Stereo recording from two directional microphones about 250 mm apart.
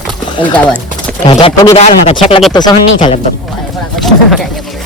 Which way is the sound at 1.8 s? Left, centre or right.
Left.